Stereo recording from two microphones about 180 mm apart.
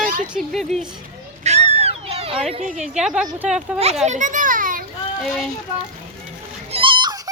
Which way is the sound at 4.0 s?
40° right (ahead or behind).